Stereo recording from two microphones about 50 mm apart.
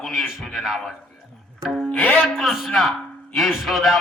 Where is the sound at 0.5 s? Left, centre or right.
Centre.